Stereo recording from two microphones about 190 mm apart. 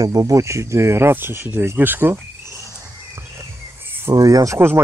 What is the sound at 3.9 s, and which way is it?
Speech, 15° right (ahead or behind).